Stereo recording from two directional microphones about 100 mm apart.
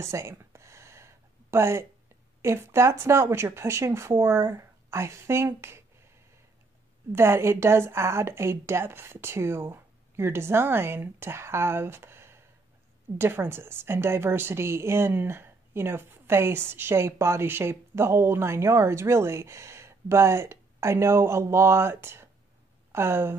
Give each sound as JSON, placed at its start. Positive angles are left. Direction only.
{"t": 0.0, "sound": "a sound", "side_deg": -30}
{"t": 2.4, "sound": "a woman's voice", "side_deg": -25}
{"t": 7.1, "sound": "a woman's voice", "side_deg": -25}